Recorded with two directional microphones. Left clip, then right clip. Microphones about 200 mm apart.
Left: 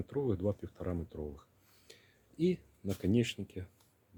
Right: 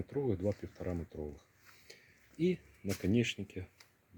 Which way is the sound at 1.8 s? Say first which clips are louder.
Left 2 dB; 5° left (ahead or behind).